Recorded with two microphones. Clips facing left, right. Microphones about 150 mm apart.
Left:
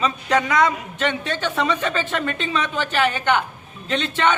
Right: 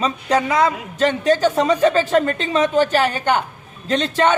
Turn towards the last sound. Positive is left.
turn(degrees=-40)  # may be behind; listen again after turning